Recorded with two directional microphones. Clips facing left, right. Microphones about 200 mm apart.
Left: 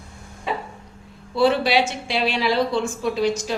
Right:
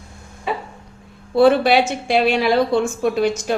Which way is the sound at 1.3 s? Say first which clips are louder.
Right 5 dB; 55° right (ahead or behind).